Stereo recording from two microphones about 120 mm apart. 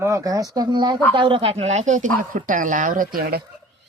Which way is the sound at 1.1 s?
45° right (ahead or behind).